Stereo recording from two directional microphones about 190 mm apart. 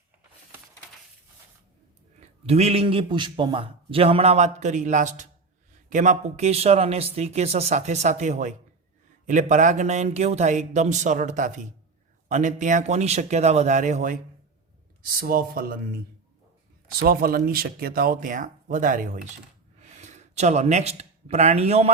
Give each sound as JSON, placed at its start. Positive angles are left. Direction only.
{"t": 2.2, "sound": "a man's voice", "side_deg": -35}
{"t": 17.0, "sound": "speech", "side_deg": -50}